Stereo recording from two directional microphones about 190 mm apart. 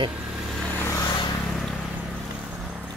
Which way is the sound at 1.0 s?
25° left (ahead or behind).